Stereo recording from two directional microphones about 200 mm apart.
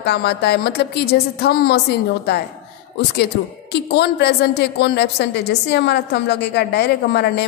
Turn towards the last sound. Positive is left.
turn(degrees=55)  # may be behind; listen again after turning